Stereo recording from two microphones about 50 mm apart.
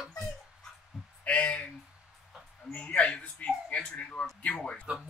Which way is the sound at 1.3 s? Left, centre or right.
Left.